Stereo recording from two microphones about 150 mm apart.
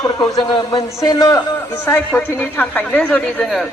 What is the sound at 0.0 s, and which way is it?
A man's voice, 25° left (ahead or behind).